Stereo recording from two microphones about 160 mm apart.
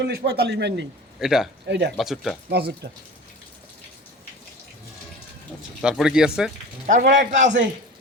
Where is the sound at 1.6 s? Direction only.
90° right.